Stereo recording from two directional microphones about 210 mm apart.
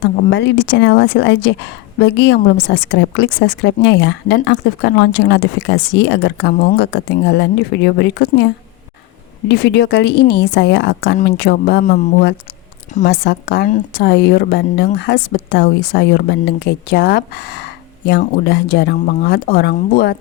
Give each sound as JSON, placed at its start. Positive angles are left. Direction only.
{"t": 0.3, "sound": "a woman's voice", "side_deg": 55}
{"t": 9.5, "sound": "speech", "side_deg": 55}
{"t": 12.9, "sound": "a woman's voice", "side_deg": 35}
{"t": 13.2, "sound": "speech", "side_deg": 50}